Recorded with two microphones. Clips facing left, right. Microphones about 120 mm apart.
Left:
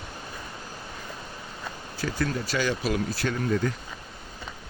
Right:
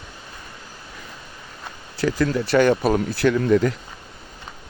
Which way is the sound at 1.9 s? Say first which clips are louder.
Right 8 dB; 70° right (ahead or behind).